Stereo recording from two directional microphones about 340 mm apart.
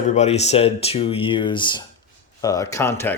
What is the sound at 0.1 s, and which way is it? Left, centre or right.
Speech, centre.